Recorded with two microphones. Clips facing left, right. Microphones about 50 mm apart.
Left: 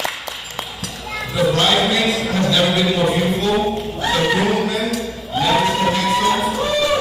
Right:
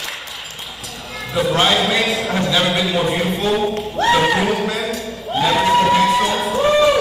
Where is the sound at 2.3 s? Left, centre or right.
Centre.